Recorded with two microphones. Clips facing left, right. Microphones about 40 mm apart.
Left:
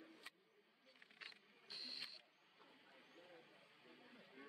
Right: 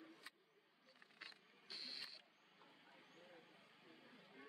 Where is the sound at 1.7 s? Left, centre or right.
Right.